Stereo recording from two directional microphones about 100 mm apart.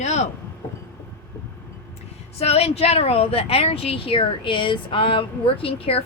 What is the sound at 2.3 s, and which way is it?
Speech, 90° left.